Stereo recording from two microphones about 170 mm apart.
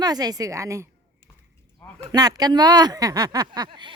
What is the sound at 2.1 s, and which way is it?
Speech, 25° right (ahead or behind).